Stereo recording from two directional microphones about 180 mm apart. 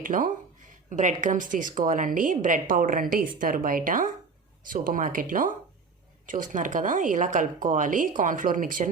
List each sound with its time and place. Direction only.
0.0 s speech: 50° right (ahead or behind)